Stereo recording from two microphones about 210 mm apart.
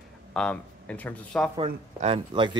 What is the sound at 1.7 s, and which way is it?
Speech, 30° right (ahead or behind).